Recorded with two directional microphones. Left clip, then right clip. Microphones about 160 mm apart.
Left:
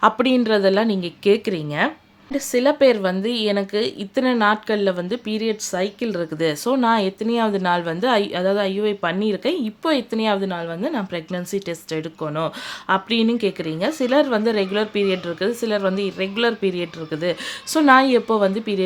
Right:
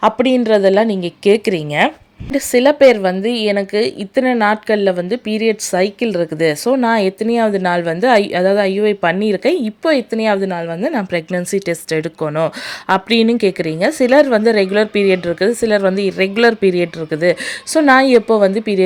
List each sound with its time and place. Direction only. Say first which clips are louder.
0.0 s a woman's voice: right 4 dB; 15° right (ahead or behind)